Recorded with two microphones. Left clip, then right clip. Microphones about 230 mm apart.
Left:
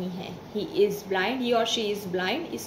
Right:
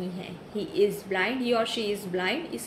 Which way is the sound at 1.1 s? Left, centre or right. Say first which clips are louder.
Left 1 dB; centre.